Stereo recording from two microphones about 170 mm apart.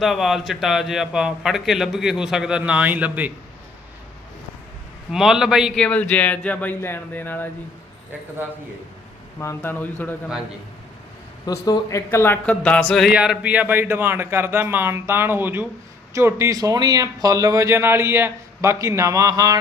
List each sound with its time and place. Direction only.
0.0 s speech: centre (ahead or behind)
5.1 s a man's voice: 5° right (ahead or behind)
9.4 s a man's voice: 15° left (ahead or behind)
11.4 s a man's voice: 20° left (ahead or behind); by 13.1 s 5° left (ahead or behind)
13.1 s speech: 5° right (ahead or behind)